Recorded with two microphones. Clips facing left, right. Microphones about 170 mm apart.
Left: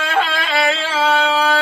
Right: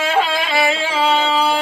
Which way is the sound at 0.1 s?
10° right (ahead or behind).